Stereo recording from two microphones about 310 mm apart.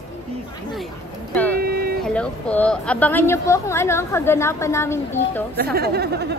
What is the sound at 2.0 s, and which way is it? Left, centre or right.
A woman's voice, centre.